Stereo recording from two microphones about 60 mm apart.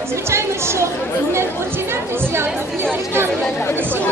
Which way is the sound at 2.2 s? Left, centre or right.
Right.